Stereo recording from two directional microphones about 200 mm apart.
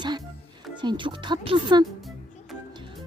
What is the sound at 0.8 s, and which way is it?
Speech, 25° right (ahead or behind).